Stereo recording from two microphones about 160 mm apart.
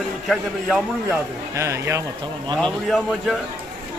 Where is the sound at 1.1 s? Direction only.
20° right (ahead or behind).